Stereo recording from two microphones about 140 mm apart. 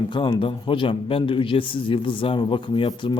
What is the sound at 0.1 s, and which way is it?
A man's voice, 35° left (ahead or behind).